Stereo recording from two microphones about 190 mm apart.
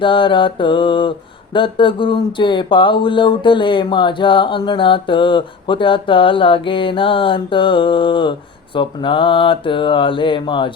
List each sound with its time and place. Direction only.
0.0 s speech: 25° left (ahead or behind)